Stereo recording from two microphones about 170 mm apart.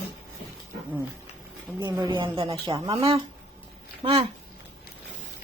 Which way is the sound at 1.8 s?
25° right (ahead or behind).